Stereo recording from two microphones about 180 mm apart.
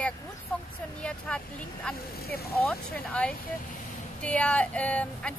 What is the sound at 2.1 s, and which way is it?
Speech, 60° left (ahead or behind).